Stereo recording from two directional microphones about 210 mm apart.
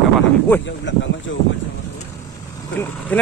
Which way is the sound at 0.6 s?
60° left (ahead or behind).